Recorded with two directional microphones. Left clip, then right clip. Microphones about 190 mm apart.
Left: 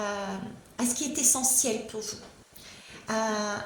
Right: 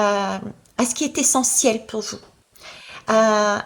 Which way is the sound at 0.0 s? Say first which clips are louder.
Right 13 dB; 35° right (ahead or behind).